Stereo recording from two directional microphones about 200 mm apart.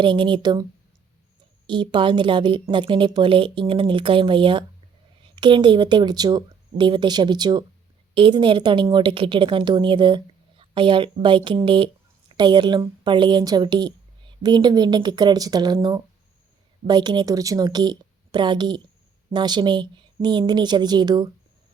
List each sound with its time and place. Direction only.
0.0 s a woman's voice: 25° right (ahead or behind)
1.6 s a woman's voice: 25° right (ahead or behind)